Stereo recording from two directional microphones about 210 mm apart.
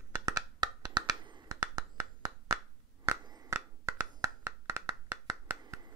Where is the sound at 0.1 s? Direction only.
15° right (ahead or behind).